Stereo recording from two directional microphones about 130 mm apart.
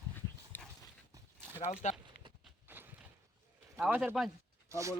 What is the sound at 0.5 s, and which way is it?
Dog, 15° left (ahead or behind).